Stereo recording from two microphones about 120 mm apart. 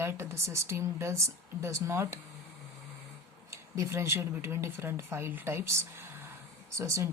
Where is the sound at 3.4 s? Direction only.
25° right (ahead or behind).